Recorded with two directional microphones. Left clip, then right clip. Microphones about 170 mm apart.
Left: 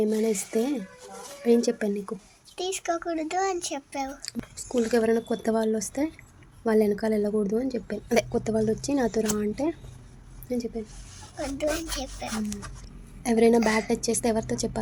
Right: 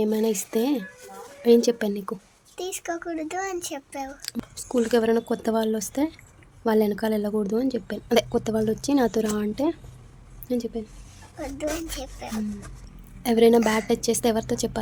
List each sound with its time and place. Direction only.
0.0 s speech: 20° right (ahead or behind)
2.6 s a woman's voice: 10° right (ahead or behind)
11.3 s a woman's voice: 5° right (ahead or behind)